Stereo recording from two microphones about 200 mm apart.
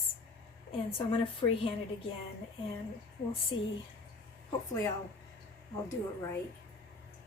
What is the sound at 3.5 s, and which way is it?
Speech, 75° left (ahead or behind).